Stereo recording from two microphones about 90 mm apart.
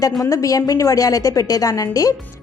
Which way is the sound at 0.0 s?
40° left (ahead or behind).